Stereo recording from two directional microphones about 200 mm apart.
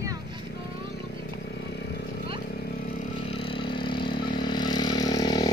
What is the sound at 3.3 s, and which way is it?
Vehicle, 25° left (ahead or behind).